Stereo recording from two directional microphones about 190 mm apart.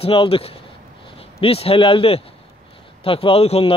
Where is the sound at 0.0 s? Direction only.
30° left (ahead or behind).